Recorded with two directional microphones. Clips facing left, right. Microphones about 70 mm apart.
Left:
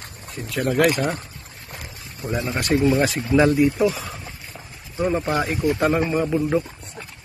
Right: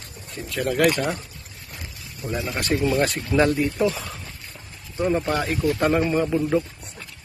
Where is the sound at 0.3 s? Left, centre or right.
Centre.